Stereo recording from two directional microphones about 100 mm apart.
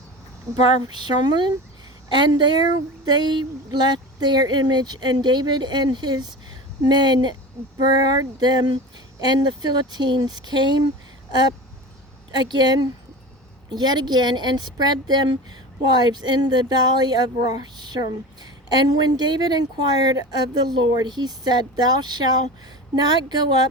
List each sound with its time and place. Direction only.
0.9 s speech: 50° right (ahead or behind)
12.4 s speech: 45° right (ahead or behind)